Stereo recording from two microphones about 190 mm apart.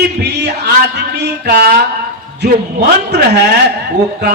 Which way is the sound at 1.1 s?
55° right (ahead or behind).